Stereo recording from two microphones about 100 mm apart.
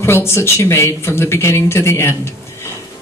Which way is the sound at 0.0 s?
25° left (ahead or behind).